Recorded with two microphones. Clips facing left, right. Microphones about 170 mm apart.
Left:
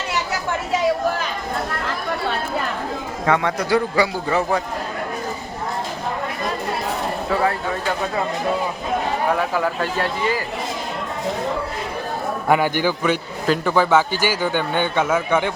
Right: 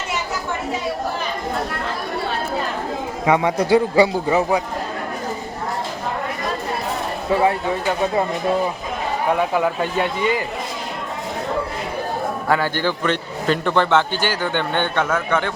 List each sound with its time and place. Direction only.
3.2 s a man's voice: 15° right (ahead or behind)
9.6 s a man's voice: 20° right (ahead or behind)
12.5 s a man's voice: 15° left (ahead or behind)